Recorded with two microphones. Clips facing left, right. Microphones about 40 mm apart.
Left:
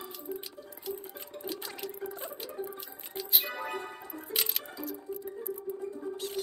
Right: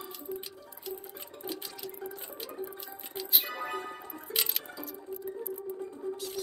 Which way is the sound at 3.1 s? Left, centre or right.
Centre.